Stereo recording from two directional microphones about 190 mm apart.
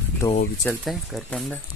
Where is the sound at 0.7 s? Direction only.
5° left (ahead or behind).